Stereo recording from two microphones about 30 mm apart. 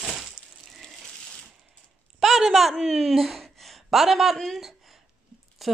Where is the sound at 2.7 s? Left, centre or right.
Centre.